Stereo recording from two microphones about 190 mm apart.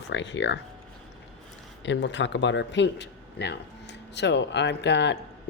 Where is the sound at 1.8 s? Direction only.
70° left (ahead or behind).